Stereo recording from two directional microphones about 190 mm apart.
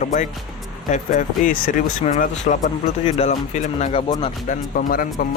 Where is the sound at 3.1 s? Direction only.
30° left (ahead or behind).